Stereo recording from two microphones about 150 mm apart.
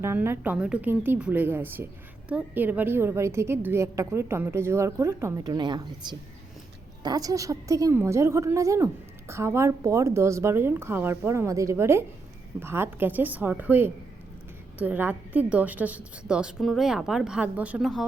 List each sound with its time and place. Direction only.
0.0 s a woman's voice: 15° right (ahead or behind)